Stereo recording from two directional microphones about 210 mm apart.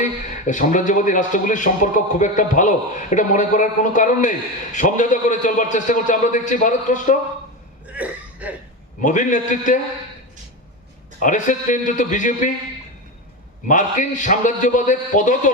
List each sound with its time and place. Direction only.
0.0 s speech: 35° left (ahead or behind)
7.9 s cough: 5° right (ahead or behind)
9.0 s speech: 35° left (ahead or behind)
11.2 s speech: 35° left (ahead or behind)
13.7 s speech: 35° left (ahead or behind)